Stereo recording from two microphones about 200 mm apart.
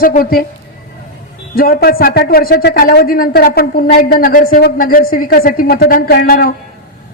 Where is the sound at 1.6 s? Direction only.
50° left (ahead or behind).